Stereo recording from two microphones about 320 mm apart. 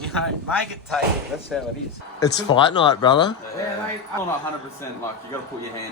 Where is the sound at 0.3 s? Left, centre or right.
Centre.